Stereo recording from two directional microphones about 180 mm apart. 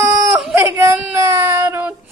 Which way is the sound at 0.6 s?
15° right (ahead or behind).